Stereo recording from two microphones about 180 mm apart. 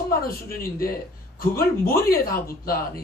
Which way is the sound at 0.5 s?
55° left (ahead or behind).